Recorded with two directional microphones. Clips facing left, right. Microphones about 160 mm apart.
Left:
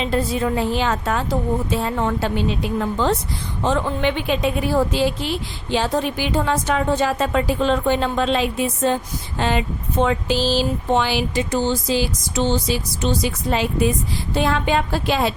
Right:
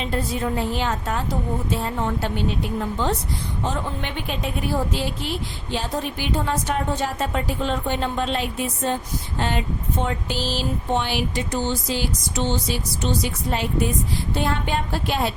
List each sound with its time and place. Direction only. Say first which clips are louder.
0.0 s a woman's voice: left 4 dB; 90° left